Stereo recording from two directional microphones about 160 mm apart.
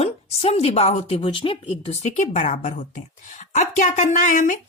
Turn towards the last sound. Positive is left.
turn(degrees=50)  # may be behind; listen again after turning